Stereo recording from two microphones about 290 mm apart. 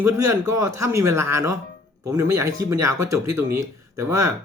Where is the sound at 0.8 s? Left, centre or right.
Centre.